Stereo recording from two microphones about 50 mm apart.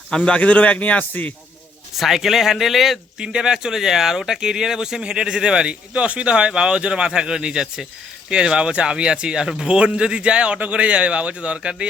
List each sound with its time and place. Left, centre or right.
0.2 s a man's voice: left
2.0 s speech: centre
3.2 s a man's voice: centre